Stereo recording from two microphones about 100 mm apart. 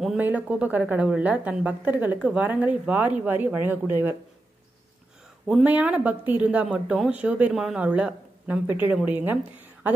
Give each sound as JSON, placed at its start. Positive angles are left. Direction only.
{"t": 0.2, "sound": "speech", "side_deg": -15}
{"t": 5.5, "sound": "speech", "side_deg": -15}